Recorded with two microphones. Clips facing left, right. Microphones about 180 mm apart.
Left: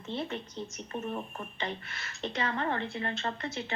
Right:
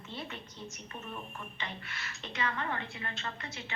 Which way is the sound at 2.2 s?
35° left (ahead or behind).